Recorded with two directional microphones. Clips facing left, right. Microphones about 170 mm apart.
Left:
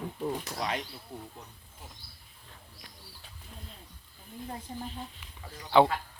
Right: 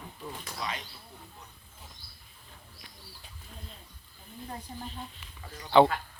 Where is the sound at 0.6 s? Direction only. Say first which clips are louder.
Even; 60° left (ahead or behind).